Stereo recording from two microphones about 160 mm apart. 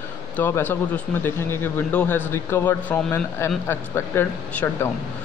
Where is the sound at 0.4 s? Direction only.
15° left (ahead or behind).